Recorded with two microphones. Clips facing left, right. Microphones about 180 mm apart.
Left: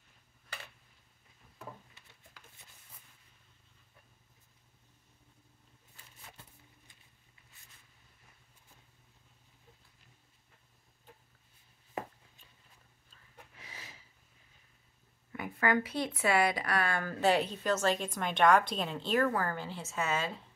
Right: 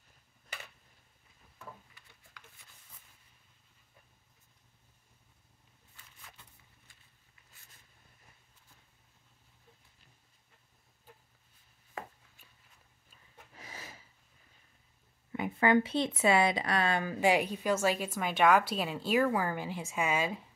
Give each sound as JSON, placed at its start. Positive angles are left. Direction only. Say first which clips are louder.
{"t": 13.6, "sound": "snort", "louder": "right 5 dB", "side_deg": -45}
{"t": 15.3, "sound": "speech", "louder": "right 4 dB", "side_deg": -25}